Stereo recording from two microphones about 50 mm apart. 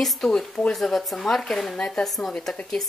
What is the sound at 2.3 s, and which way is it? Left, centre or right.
Speech, centre.